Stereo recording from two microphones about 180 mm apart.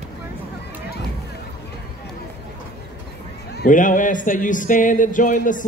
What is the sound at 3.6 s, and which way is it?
Speech, 45° left (ahead or behind).